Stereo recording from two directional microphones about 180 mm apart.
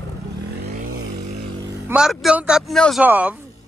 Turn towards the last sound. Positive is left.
turn(degrees=-10)  # may be behind; listen again after turning